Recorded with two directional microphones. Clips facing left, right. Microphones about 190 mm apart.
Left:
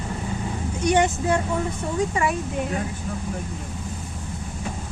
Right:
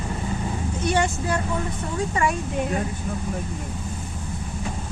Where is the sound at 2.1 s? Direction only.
10° left (ahead or behind).